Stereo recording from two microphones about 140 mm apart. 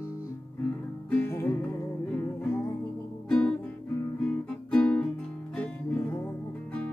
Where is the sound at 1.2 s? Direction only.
15° left (ahead or behind).